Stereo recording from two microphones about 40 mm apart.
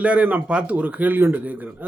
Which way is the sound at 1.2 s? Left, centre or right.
Right.